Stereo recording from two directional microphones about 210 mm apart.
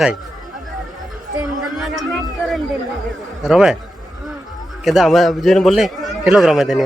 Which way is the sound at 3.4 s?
Centre (ahead or behind).